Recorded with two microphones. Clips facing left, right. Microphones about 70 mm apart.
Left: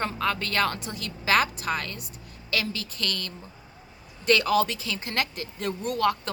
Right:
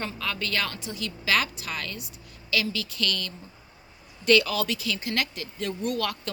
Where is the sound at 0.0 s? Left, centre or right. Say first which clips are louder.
Left 4 dB; left.